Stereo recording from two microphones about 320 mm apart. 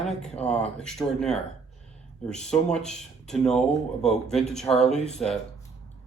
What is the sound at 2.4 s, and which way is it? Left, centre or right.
Speech, centre.